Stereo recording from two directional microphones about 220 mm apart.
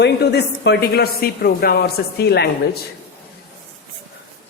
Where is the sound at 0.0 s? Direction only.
50° left (ahead or behind).